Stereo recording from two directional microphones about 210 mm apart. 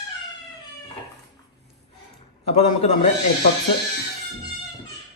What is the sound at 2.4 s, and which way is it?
Speech, 30° left (ahead or behind).